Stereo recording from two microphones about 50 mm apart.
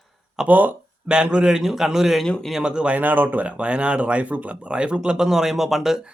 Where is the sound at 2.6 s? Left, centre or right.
Centre.